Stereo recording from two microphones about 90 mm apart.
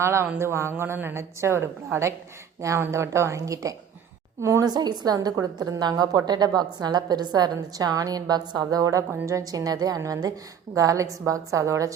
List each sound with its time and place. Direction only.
0.0 s a woman's voice: 30° right (ahead or behind)
4.7 s a woman's voice: 50° right (ahead or behind)